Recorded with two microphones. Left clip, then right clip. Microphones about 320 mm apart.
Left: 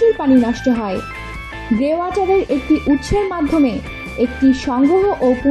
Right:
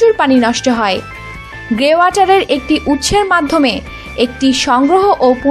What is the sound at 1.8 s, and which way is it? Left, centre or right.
A woman's voice, right.